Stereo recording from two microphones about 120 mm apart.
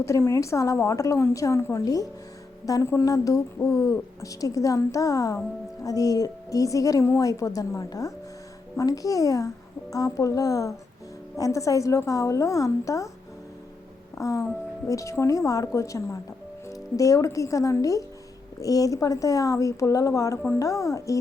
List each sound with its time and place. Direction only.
0.0 s a woman's voice: 25° left (ahead or behind)
14.2 s a woman's voice: 25° left (ahead or behind)